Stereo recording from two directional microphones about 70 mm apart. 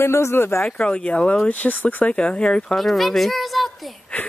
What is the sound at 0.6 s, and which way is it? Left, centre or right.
Speech, centre.